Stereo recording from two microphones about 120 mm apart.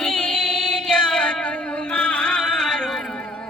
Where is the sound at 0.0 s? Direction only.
5° left (ahead or behind).